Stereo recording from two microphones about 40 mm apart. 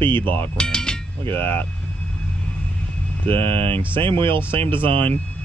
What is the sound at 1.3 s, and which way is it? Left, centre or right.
Speech, left.